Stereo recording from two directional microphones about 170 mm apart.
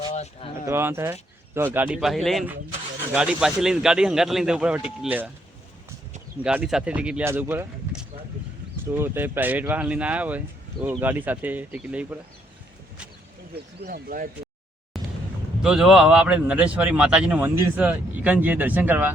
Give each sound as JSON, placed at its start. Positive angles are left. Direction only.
{"t": 0.1, "sound": "speech", "side_deg": 40}
{"t": 0.7, "sound": "speech", "side_deg": -15}
{"t": 6.4, "sound": "speech", "side_deg": -5}
{"t": 13.7, "sound": "speech", "side_deg": -70}
{"t": 14.9, "sound": "vehicle", "side_deg": 0}
{"t": 15.6, "sound": "speech", "side_deg": -5}